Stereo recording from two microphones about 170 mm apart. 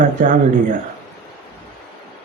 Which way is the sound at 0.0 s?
50° right (ahead or behind).